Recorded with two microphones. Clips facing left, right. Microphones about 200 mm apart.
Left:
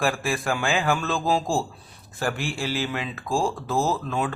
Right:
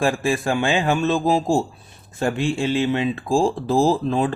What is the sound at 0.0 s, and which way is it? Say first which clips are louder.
Speech: right 5 dB; 25° right (ahead or behind).